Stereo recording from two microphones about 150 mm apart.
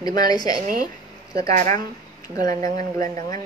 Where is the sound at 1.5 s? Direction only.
55° right (ahead or behind).